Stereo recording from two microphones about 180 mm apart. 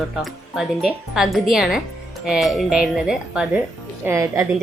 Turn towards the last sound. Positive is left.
turn(degrees=-15)  # may be behind; listen again after turning